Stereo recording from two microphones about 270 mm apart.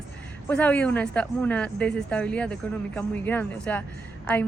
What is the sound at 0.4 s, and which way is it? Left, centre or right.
Speech, centre.